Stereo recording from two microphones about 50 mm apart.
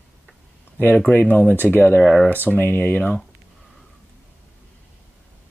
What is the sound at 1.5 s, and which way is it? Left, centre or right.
Speech, left.